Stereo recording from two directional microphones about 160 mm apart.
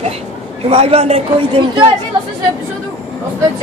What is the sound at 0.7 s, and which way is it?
A man's voice, 40° right (ahead or behind).